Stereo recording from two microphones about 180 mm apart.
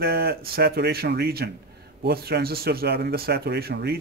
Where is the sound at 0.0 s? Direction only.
60° right (ahead or behind).